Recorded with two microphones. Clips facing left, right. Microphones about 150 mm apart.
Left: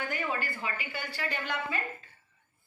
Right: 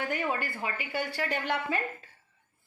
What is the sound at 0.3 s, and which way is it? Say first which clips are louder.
Speech: right 1 dB; 60° right (ahead or behind).